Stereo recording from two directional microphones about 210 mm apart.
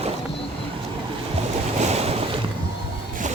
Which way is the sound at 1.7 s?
30° right (ahead or behind).